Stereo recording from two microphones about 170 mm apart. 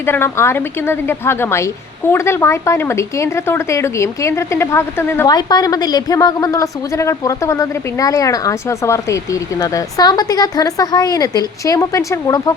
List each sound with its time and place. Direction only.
0.0 s a woman's voice: 15° left (ahead or behind)